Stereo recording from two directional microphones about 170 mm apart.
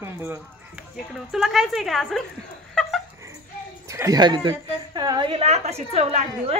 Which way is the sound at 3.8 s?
20° right (ahead or behind).